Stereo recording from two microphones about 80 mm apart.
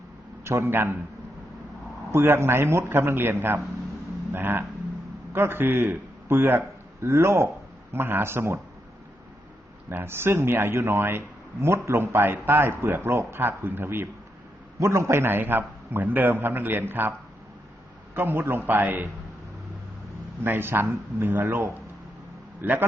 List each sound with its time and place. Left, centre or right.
0.4 s a man's voice: right
2.1 s a man's voice: right
9.9 s a man's voice: right
14.8 s a man's voice: right
20.4 s a man's voice: right